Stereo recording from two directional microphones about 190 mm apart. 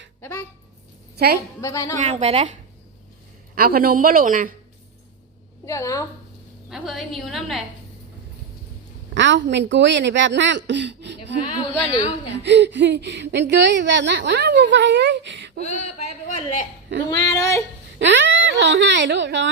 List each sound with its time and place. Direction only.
0.2 s a sound: 15° left (ahead or behind)
1.1 s a woman's voice: 55° right (ahead or behind)
1.6 s a sound: 15° left (ahead or behind)
2.0 s a woman's voice: 35° right (ahead or behind)
3.5 s a woman's voice: 50° right (ahead or behind)
5.6 s a sound: 15° left (ahead or behind)
6.7 s a woman's voice: centre (ahead or behind)
9.1 s a woman's voice: 70° right (ahead or behind)
11.9 s a woman's voice: 25° left (ahead or behind)
12.4 s a woman's voice: 65° right (ahead or behind)
15.6 s speech: 35° left (ahead or behind)
17.1 s a sound: 20° left (ahead or behind)
18.0 s a woman's voice: 70° right (ahead or behind)